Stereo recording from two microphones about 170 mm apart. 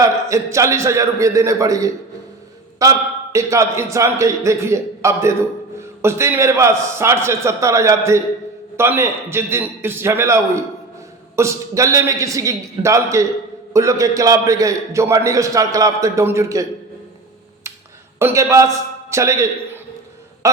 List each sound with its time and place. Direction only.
0.0 s a man's voice: 15° right (ahead or behind)
18.2 s a man's voice: 15° right (ahead or behind)
20.4 s a sound: 20° right (ahead or behind)